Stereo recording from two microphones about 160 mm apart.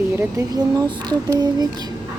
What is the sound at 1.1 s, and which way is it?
Speech, 25° right (ahead or behind).